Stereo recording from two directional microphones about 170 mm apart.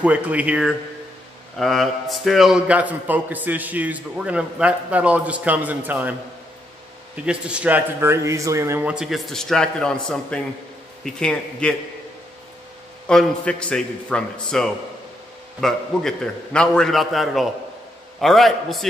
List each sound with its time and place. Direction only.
0.0 s a man's voice: 10° right (ahead or behind)
7.2 s a man's voice: 5° right (ahead or behind)
13.0 s a man's voice: 5° left (ahead or behind)